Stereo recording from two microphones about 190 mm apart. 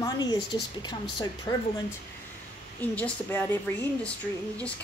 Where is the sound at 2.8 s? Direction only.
10° left (ahead or behind).